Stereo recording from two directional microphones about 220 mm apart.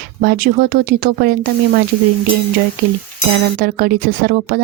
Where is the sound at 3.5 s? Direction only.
40° right (ahead or behind).